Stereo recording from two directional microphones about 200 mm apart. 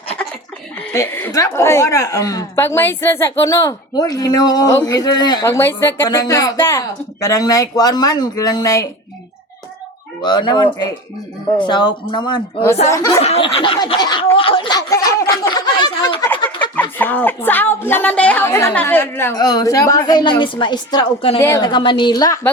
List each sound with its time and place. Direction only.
0.9 s a woman's voice: 15° left (ahead or behind)
10.2 s snicker: 20° left (ahead or behind)
12.9 s a woman's voice: 15° left (ahead or behind)
13.2 s snicker: 30° left (ahead or behind)
17.0 s a woman's voice: 10° left (ahead or behind); by 21.3 s 25° left (ahead or behind)
21.3 s snicker: 15° left (ahead or behind)